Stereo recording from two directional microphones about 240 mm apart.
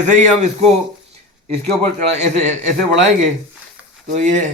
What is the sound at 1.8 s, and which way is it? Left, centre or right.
Speech, right.